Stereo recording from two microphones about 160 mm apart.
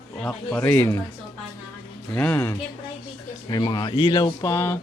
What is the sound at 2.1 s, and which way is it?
Speech, 10° left (ahead or behind).